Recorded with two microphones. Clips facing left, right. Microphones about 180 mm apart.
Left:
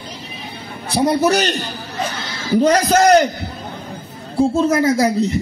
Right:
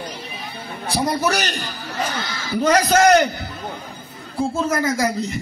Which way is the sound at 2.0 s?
30° left (ahead or behind).